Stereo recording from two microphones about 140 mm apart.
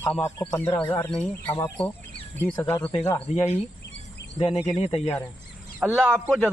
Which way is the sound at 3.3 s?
55° left (ahead or behind).